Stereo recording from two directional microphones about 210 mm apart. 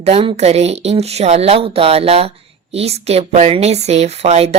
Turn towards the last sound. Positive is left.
turn(degrees=-30)  # may be behind; listen again after turning